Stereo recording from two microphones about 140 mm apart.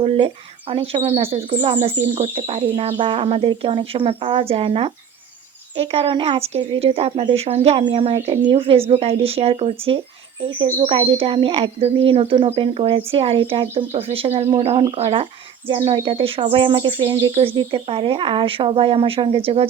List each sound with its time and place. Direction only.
0.0 s speech: 40° right (ahead or behind)